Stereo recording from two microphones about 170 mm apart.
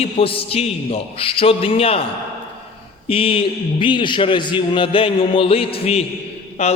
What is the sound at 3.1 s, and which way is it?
A man's voice, 35° left (ahead or behind).